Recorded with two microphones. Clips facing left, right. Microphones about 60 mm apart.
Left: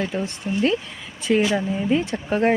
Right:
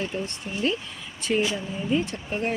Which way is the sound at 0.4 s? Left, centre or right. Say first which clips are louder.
Left 8 dB; left.